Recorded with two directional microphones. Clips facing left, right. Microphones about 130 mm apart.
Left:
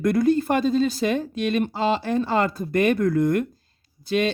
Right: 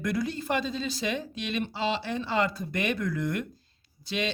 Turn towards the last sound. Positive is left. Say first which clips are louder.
# left 9 dB
turn(degrees=50)  # may be behind; listen again after turning